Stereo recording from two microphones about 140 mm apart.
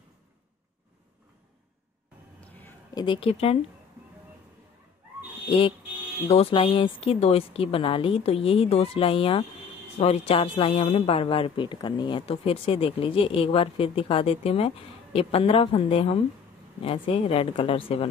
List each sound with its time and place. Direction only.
2.9 s a woman's voice: 30° left (ahead or behind)
3.2 s speech: 45° left (ahead or behind)
6.2 s speech: 45° left (ahead or behind)